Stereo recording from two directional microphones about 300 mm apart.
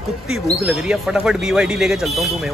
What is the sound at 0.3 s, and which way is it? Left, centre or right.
Speech, centre.